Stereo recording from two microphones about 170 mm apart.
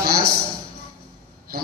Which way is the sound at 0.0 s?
65° right (ahead or behind).